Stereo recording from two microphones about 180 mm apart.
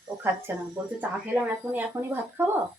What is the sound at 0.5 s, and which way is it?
Speech, 10° right (ahead or behind).